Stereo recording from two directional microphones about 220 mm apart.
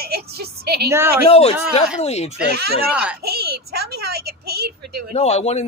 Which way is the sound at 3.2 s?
45° right (ahead or behind).